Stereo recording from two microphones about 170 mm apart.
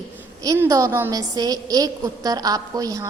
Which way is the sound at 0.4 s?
20° right (ahead or behind).